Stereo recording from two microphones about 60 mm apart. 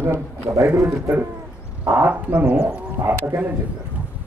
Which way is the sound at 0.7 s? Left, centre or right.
Right.